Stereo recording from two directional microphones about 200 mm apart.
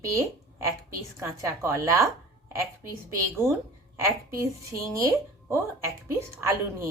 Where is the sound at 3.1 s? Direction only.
15° right (ahead or behind).